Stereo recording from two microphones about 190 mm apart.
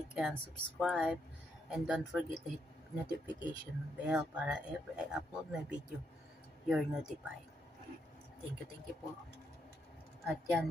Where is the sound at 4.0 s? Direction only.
5° right (ahead or behind).